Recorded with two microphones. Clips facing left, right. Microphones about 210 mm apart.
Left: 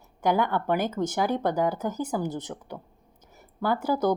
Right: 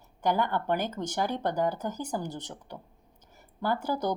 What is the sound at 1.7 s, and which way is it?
Speech, 10° left (ahead or behind).